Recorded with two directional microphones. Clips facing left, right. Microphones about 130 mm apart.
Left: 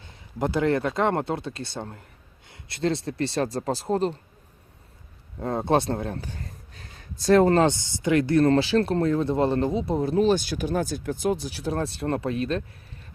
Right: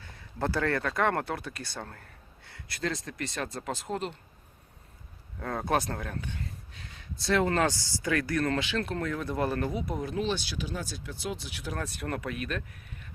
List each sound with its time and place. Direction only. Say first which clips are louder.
0.0 s speech: left 4 dB; 20° left (ahead or behind); by 4.2 s 35° left (ahead or behind)
5.4 s speech: left 6 dB; 25° left (ahead or behind)